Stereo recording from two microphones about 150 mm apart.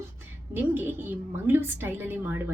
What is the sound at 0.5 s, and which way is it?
Speech, 15° right (ahead or behind).